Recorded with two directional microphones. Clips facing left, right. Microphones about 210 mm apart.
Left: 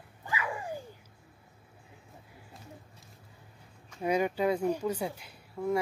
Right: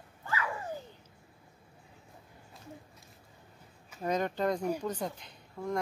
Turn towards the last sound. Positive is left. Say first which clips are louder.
# left 5 dB
turn(degrees=5)  # may be behind; listen again after turning